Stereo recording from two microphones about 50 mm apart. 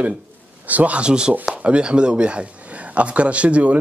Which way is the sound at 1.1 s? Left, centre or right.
Centre.